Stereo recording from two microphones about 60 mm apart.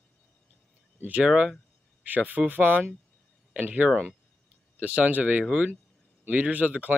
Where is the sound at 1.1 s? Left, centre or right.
Right.